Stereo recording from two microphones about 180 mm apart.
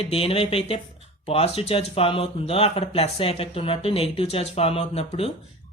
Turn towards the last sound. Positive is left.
turn(degrees=35)  # may be behind; listen again after turning